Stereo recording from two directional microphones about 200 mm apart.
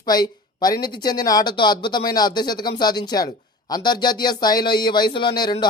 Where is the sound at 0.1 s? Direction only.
20° left (ahead or behind).